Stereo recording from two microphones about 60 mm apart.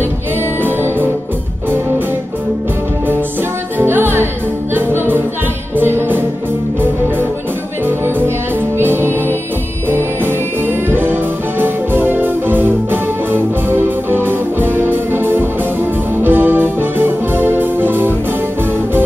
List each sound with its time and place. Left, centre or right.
0.6 s music: right
3.7 s music: right
8.7 s music: right